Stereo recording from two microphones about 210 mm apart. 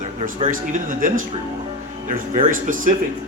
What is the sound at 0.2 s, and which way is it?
Speech, 35° right (ahead or behind).